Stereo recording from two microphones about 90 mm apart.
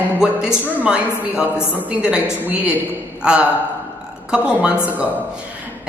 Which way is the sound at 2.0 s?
10° right (ahead or behind).